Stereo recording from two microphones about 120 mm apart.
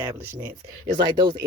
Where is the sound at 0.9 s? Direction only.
40° right (ahead or behind).